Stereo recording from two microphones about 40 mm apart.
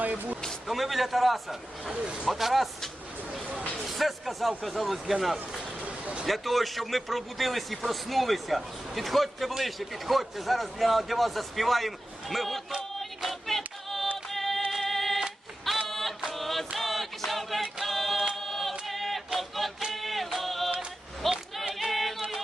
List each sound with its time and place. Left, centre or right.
0.7 s a man's voice: centre
1.9 s speech: right
2.2 s a man's voice: centre
13.0 s choir: centre
13.9 s music: centre
16.3 s chant: centre
18.3 s choir: centre
19.9 s music: centre
21.2 s a sound: centre